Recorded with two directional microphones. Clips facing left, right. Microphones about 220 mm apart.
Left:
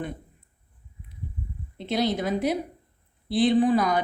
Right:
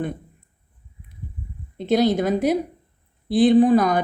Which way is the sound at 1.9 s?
45° right (ahead or behind).